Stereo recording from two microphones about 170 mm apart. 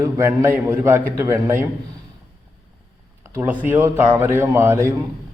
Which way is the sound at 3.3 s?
15° right (ahead or behind).